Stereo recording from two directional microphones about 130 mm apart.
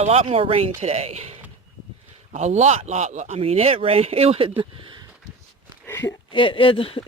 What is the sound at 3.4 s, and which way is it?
Speech, 50° right (ahead or behind).